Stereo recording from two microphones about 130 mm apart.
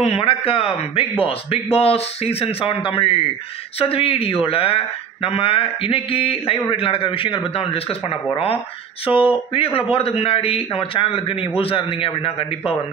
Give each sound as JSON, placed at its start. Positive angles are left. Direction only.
{"t": 0.0, "sound": "speech", "side_deg": 50}